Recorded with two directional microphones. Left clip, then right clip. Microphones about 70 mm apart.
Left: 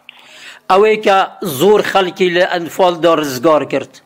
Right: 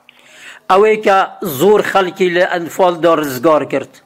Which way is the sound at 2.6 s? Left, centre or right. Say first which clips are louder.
Even; centre.